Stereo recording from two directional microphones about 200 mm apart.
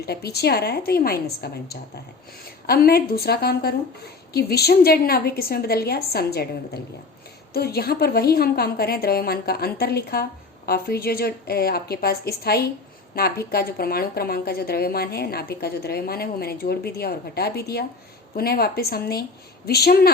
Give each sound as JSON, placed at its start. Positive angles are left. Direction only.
{"t": 0.0, "sound": "a woman's voice", "side_deg": 50}
{"t": 7.5, "sound": "a woman's voice", "side_deg": 50}